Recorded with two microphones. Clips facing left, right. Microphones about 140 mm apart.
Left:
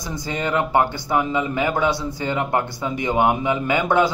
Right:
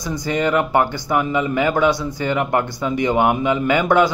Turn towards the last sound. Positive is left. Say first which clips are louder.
# right 3 dB
turn(degrees=20)  # may be behind; listen again after turning